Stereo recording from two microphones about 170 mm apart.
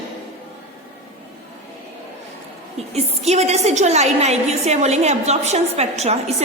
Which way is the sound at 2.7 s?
40° right (ahead or behind).